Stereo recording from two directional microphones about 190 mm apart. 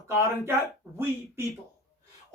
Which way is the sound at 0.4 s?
10° right (ahead or behind).